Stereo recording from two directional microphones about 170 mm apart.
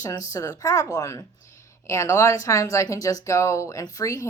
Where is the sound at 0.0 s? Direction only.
20° left (ahead or behind).